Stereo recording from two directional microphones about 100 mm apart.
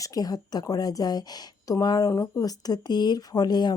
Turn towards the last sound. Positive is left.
turn(degrees=45)  # may be behind; listen again after turning